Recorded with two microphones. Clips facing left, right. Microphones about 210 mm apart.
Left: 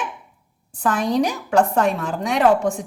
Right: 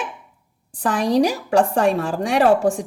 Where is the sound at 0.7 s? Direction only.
35° right (ahead or behind).